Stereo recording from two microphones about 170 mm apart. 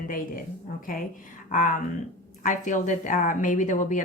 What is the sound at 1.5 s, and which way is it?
Speech, 50° left (ahead or behind).